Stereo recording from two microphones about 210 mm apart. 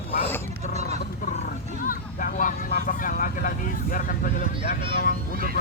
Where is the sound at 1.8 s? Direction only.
40° left (ahead or behind).